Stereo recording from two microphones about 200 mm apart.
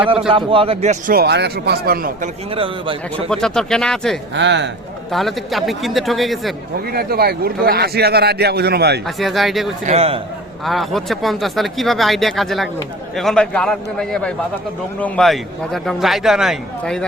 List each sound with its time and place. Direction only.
0.3 s a man's voice: 25° right (ahead or behind)
1.1 s a man's voice: 55° right (ahead or behind)
2.6 s a man's voice: 25° right (ahead or behind)
3.2 s a man's voice: 5° left (ahead or behind)
4.4 s speech: 65° right (ahead or behind)
5.1 s a man's voice: centre (ahead or behind)
6.9 s a man's voice: 50° right (ahead or behind)
9.0 s a man's voice: centre (ahead or behind)
9.8 s a man's voice: 30° right (ahead or behind)
10.7 s a man's voice: centre (ahead or behind)